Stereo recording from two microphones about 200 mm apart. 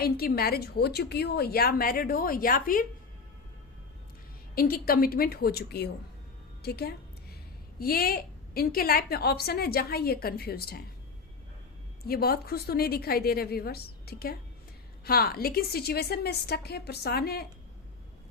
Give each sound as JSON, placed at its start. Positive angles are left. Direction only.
{"t": 0.0, "sound": "a woman's voice", "side_deg": 50}
{"t": 4.5, "sound": "a woman's voice", "side_deg": 45}
{"t": 12.0, "sound": "a woman's voice", "side_deg": 50}